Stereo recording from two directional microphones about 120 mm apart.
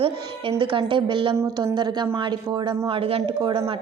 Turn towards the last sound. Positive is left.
turn(degrees=-45)  # may be behind; listen again after turning